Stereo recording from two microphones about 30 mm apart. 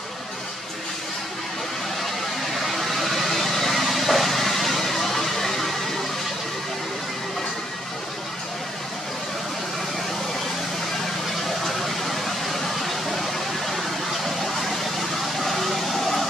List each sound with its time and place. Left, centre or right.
2.6 s vehicle: centre
11.6 s vehicle: centre